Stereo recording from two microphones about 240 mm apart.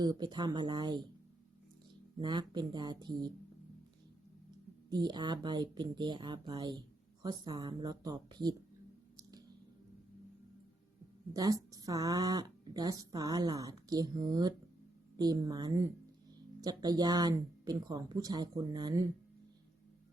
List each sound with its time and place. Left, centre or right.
0.0 s speech: centre
2.1 s speech: centre
4.9 s speech: centre
11.3 s speech: centre